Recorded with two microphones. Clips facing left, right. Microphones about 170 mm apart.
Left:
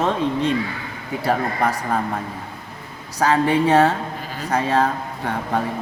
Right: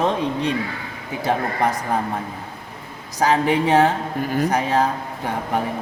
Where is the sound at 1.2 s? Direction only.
20° right (ahead or behind).